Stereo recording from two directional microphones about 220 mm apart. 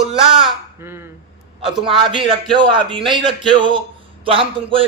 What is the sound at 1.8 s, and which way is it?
A man's voice, 25° right (ahead or behind).